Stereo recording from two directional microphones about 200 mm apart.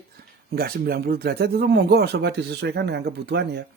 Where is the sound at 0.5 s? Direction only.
50° right (ahead or behind).